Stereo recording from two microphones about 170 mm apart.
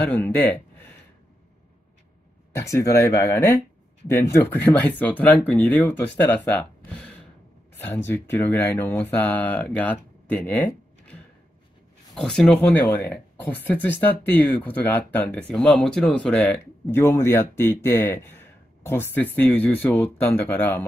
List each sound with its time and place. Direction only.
0.0 s speech: 10° left (ahead or behind)
2.5 s speech: 15° left (ahead or behind)
7.7 s speech: 10° left (ahead or behind)
12.2 s speech: 5° left (ahead or behind)